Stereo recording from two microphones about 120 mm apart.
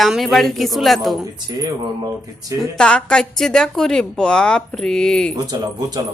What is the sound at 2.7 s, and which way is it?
Speech, 5° left (ahead or behind).